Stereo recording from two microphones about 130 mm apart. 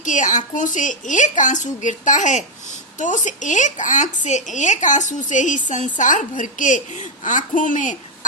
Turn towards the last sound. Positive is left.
turn(degrees=75)  # may be behind; listen again after turning